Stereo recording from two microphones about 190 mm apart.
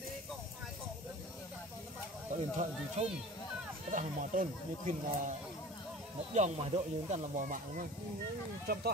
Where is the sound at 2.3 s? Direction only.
35° right (ahead or behind).